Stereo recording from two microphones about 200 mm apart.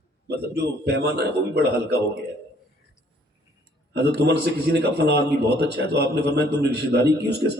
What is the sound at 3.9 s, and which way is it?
A man's voice, 55° right (ahead or behind).